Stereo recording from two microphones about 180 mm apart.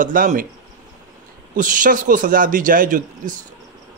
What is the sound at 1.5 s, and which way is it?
Speech, 45° right (ahead or behind).